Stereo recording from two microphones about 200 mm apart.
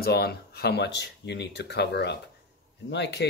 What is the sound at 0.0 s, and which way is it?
Speech, 55° left (ahead or behind).